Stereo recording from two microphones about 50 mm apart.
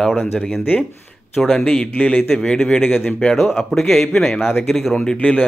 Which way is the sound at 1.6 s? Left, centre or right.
Centre.